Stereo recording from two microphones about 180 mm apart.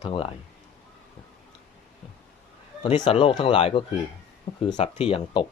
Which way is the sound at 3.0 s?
30° left (ahead or behind).